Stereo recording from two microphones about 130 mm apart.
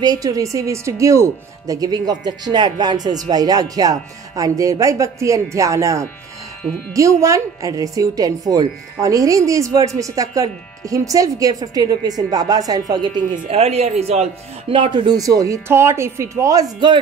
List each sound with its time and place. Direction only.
0.0 s a woman's voice: 30° right (ahead or behind)
13.5 s a man's voice: 55° right (ahead or behind)
14.7 s a woman's voice: 40° right (ahead or behind)